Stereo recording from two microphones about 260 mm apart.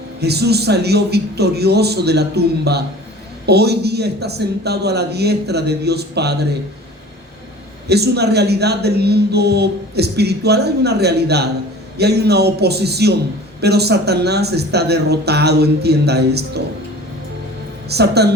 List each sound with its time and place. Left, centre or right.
0.2 s a man's voice: right
7.9 s a man's voice: right
17.8 s a man's voice: right